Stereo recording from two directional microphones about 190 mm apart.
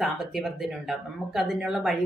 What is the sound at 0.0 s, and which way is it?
Speech, centre (ahead or behind).